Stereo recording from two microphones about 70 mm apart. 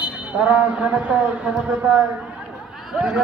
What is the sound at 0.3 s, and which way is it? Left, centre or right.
Speech, centre.